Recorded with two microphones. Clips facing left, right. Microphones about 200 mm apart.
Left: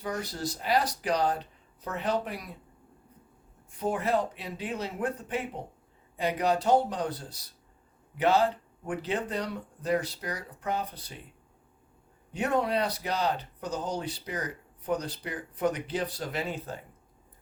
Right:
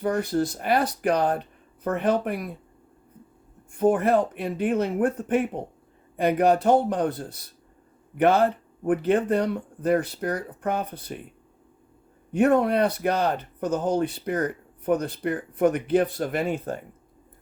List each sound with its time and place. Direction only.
0.0 s speech: 55° right (ahead or behind)
3.7 s speech: 50° right (ahead or behind)
12.3 s speech: 55° right (ahead or behind)